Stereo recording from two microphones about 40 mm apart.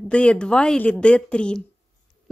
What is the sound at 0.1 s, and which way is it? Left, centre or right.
Speech, left.